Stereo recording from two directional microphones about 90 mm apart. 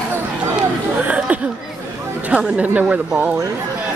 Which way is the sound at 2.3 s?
15° right (ahead or behind).